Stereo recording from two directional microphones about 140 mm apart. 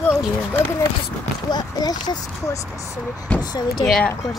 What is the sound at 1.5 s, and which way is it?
Speech, 30° left (ahead or behind).